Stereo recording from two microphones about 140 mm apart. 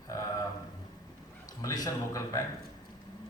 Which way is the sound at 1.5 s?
25° left (ahead or behind).